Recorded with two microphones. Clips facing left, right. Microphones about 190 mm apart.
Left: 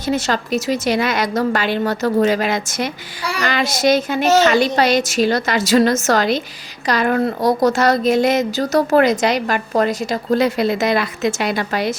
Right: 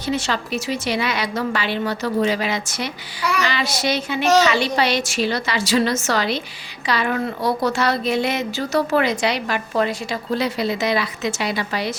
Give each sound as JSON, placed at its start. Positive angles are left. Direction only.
{"t": 0.0, "sound": "speech", "side_deg": 45}